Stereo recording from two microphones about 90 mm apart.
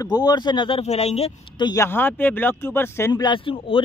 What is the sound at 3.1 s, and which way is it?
Speech, 55° left (ahead or behind).